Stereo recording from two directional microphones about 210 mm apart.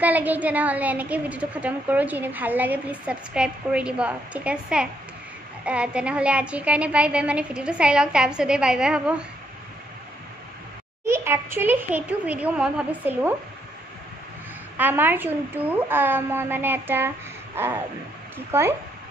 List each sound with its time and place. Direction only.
0.0 s a woman's voice: 10° right (ahead or behind)
11.1 s a woman's voice: 10° right (ahead or behind)
14.8 s a woman's voice: 10° right (ahead or behind)